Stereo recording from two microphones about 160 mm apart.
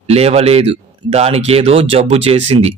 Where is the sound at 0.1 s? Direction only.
40° right (ahead or behind).